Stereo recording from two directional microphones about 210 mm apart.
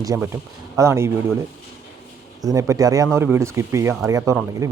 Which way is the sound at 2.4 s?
15° right (ahead or behind).